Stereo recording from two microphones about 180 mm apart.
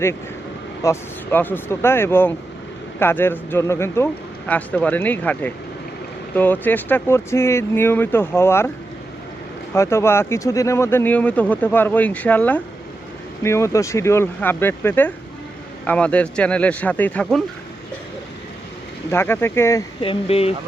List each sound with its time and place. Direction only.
0.8 s speech: 15° left (ahead or behind)
9.7 s speech: 15° left (ahead or behind)
19.1 s speech: 15° left (ahead or behind)
20.0 s speech: 30° left (ahead or behind)